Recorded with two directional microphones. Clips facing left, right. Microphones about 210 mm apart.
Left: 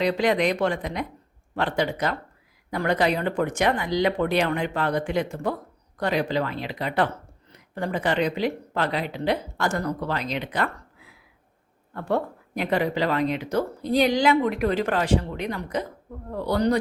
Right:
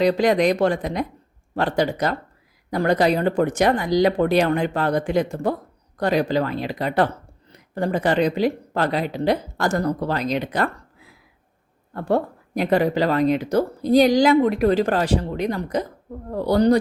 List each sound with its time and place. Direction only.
0.0 s speech: 40° right (ahead or behind)
11.9 s speech: 40° right (ahead or behind)